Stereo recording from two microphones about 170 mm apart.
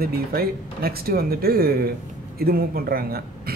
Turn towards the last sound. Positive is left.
turn(degrees=-60)  # may be behind; listen again after turning